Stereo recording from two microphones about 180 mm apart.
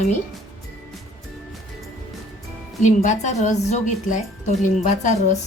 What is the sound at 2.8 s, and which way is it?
A woman's voice, 40° left (ahead or behind).